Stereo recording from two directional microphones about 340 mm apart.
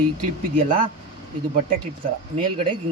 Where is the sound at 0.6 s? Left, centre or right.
Centre.